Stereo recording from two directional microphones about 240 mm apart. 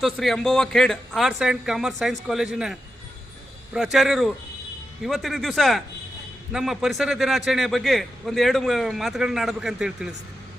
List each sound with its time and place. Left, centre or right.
0.0 s a man's voice: centre
3.9 s a man's voice: centre